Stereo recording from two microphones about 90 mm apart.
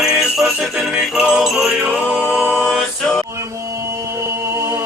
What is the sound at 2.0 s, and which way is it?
A capella, 20° left (ahead or behind).